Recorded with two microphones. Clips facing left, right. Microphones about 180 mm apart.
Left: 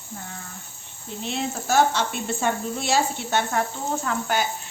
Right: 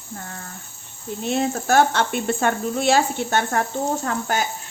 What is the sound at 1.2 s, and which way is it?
Frying, 50° right (ahead or behind).